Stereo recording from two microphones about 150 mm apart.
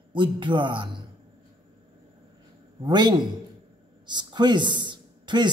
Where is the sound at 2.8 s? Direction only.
30° right (ahead or behind).